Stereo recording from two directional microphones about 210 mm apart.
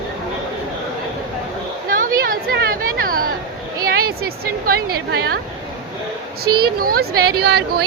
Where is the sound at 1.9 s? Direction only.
40° right (ahead or behind).